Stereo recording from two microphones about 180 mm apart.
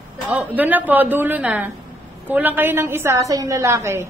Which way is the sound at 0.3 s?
10° right (ahead or behind).